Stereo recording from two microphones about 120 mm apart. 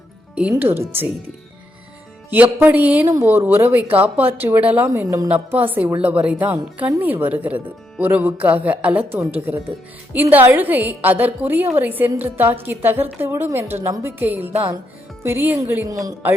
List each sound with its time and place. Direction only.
0.5 s a woman's voice: 20° right (ahead or behind)
2.3 s a woman's voice: 15° right (ahead or behind)